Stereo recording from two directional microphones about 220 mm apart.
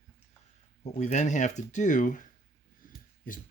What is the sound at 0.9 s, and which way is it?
Speech, 30° left (ahead or behind).